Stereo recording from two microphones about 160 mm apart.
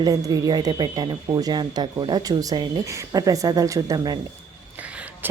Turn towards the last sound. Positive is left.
turn(degrees=-20)  # may be behind; listen again after turning